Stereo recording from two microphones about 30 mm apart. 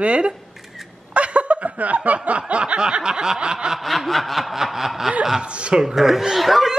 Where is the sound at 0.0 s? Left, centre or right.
Right.